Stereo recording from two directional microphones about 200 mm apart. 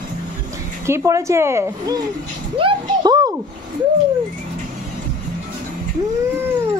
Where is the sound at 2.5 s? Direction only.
25° right (ahead or behind).